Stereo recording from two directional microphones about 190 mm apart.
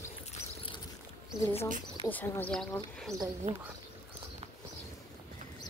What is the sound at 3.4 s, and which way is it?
Speech, 35° right (ahead or behind).